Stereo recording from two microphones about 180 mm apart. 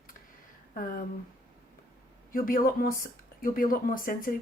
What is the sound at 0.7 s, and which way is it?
Speech, 50° left (ahead or behind).